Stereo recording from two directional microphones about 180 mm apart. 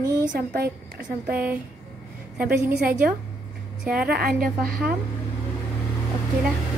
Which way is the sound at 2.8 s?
50° right (ahead or behind).